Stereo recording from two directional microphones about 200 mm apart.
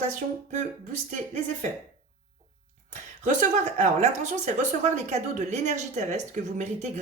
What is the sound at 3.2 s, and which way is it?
A woman's voice, 35° right (ahead or behind).